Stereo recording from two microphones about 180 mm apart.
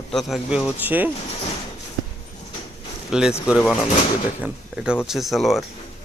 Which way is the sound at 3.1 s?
5° right (ahead or behind).